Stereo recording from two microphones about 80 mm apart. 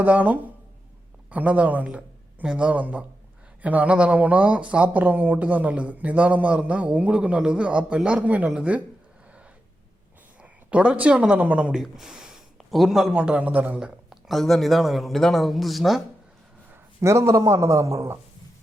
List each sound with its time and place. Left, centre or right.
0.0 s speech: right
10.4 s speech: centre
11.8 s a man's voice: centre
17.0 s a man's voice: right